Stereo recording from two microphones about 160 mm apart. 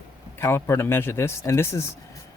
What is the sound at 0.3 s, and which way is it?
Speech, 15° left (ahead or behind).